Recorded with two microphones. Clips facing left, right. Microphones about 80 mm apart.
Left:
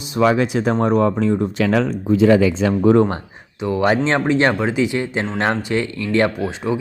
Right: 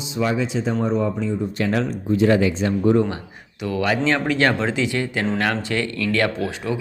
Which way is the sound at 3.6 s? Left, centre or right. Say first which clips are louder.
Left 4 dB; left.